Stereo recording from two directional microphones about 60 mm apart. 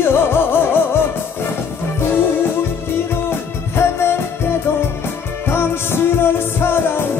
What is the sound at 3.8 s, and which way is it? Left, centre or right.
Music, left.